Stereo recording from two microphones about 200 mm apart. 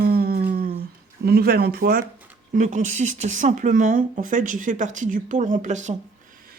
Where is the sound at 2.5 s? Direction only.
40° right (ahead or behind).